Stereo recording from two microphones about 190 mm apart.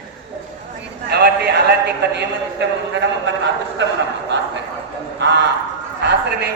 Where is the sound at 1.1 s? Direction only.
60° right (ahead or behind).